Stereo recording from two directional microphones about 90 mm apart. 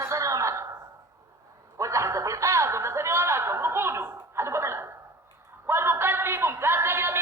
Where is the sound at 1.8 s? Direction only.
35° right (ahead or behind).